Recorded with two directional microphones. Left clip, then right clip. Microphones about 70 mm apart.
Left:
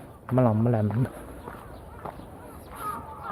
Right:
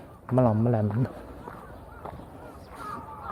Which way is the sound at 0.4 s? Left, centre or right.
Centre.